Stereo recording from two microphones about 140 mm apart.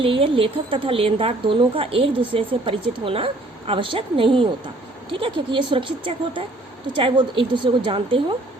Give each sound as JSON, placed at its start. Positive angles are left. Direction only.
{"t": 0.0, "sound": "a woman's voice", "side_deg": -40}